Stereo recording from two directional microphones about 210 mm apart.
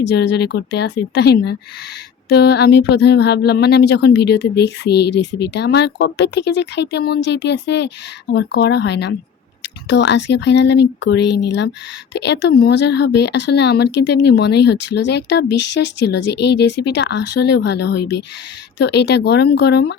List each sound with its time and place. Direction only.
0.0 s speech: 55° left (ahead or behind)